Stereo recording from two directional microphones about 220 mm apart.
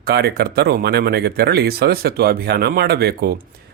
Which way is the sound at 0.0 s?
45° right (ahead or behind).